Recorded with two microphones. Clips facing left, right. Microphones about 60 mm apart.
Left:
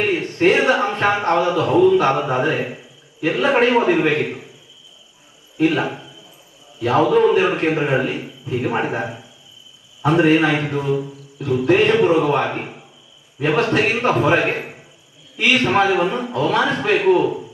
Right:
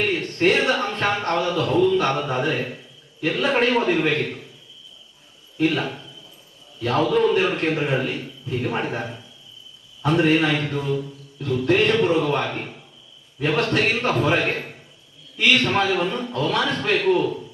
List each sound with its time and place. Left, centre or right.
0.0 s a man's voice: centre
5.5 s a man's voice: centre